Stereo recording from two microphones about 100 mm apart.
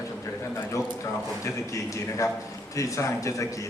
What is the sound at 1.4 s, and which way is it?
A man's voice, 30° left (ahead or behind).